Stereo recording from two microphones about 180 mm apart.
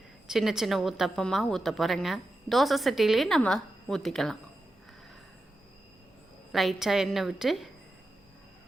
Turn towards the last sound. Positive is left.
turn(degrees=0)  # may be behind; listen again after turning